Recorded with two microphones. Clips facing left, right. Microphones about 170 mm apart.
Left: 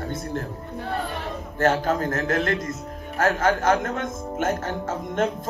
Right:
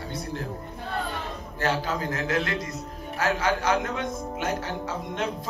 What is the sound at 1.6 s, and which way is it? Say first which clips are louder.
Speech: left 6 dB; 50° left (ahead or behind).